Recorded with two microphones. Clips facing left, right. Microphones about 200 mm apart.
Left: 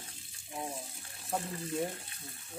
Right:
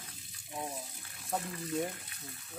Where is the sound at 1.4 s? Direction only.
30° left (ahead or behind).